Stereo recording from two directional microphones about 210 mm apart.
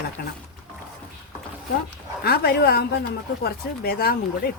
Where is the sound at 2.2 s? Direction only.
45° left (ahead or behind).